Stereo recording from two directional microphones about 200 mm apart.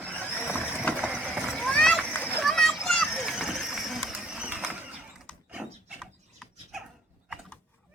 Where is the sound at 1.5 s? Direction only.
5° left (ahead or behind).